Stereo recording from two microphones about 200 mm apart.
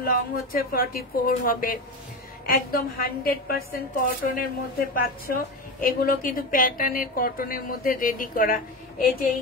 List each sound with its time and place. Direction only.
0.0 s a woman's voice: 45° left (ahead or behind)